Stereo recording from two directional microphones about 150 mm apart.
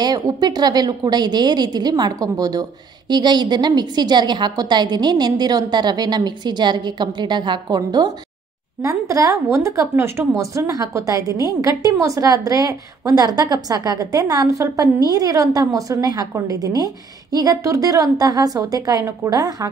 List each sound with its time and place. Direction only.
0.0 s a woman's voice: 25° right (ahead or behind)